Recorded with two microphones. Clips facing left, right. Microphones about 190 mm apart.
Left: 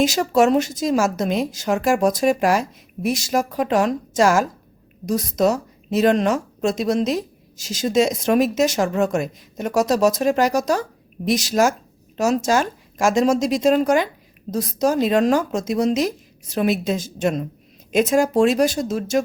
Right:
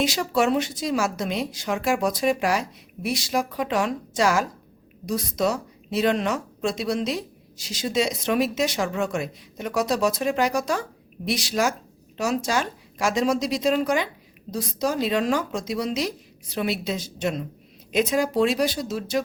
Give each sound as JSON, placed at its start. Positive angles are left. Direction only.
{"t": 0.0, "sound": "speech", "side_deg": 45}